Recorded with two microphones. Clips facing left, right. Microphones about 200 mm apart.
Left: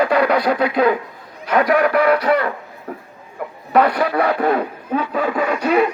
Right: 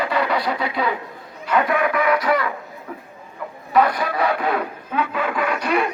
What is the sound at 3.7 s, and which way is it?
Speech, 60° left (ahead or behind).